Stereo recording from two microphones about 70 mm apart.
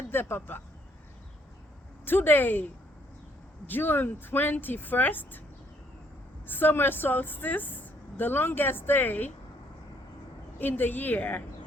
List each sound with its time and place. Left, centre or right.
0.1 s speech: left
2.0 s a woman's voice: left
3.7 s a woman's voice: left
6.5 s a woman's voice: left
10.6 s a woman's voice: left